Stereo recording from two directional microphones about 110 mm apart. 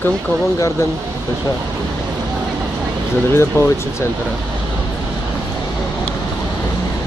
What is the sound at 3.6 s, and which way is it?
Speech, 25° left (ahead or behind).